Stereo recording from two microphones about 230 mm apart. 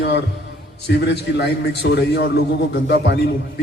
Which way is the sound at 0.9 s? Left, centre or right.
Left.